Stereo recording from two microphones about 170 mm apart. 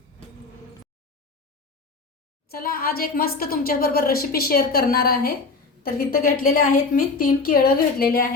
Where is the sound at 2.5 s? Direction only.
60° left (ahead or behind).